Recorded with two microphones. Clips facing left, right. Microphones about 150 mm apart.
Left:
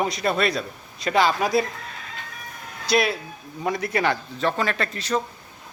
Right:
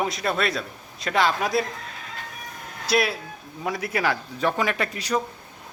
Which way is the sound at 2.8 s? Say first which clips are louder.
Left 1 dB; centre (ahead or behind).